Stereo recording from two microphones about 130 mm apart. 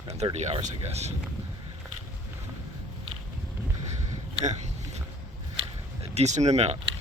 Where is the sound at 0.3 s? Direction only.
55° right (ahead or behind).